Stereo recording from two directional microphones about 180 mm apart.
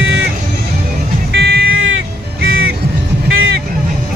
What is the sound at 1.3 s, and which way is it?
Music, 65° right (ahead or behind).